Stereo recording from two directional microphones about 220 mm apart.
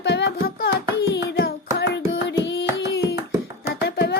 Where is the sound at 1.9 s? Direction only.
50° left (ahead or behind).